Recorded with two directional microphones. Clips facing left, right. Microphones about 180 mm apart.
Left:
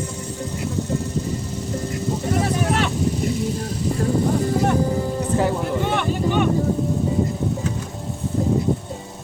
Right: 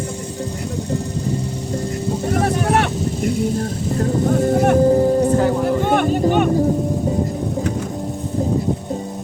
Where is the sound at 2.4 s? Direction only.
55° right (ahead or behind).